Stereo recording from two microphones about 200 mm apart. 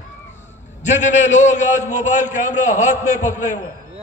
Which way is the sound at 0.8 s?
35° left (ahead or behind).